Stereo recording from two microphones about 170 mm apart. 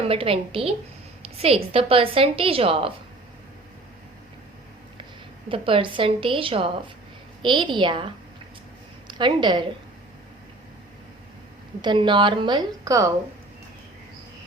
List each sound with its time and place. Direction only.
0.0 s a woman's voice: 35° right (ahead or behind)
5.5 s a woman's voice: 30° right (ahead or behind)
11.8 s a woman's voice: 25° right (ahead or behind)